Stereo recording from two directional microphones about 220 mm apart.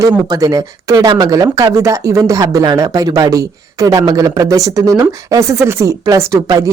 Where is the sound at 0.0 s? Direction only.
15° right (ahead or behind).